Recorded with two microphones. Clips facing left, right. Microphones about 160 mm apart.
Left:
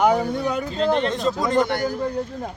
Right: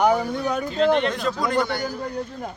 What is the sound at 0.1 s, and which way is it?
Speech, 25° left (ahead or behind).